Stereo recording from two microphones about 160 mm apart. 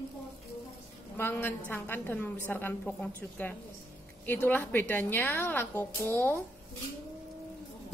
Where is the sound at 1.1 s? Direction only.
15° left (ahead or behind).